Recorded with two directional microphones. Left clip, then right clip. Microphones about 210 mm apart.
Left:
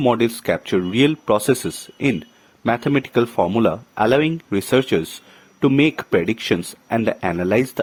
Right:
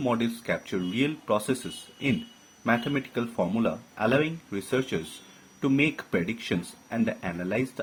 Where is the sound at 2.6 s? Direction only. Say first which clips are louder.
Left 8 dB; 50° left (ahead or behind).